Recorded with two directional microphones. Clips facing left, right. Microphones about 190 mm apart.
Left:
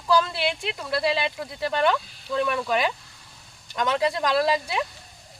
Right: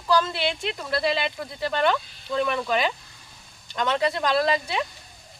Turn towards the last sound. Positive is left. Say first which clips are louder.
# even
turn(degrees=5)  # may be behind; listen again after turning